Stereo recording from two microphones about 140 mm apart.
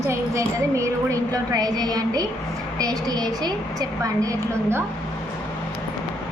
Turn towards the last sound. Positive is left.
turn(degrees=-25)  # may be behind; listen again after turning